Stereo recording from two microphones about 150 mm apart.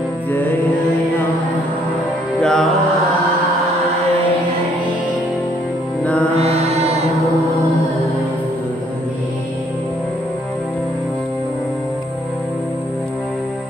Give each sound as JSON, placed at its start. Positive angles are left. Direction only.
{"t": 0.3, "sound": "music", "side_deg": 10}
{"t": 2.4, "sound": "music", "side_deg": 5}
{"t": 6.3, "sound": "mantra", "side_deg": -45}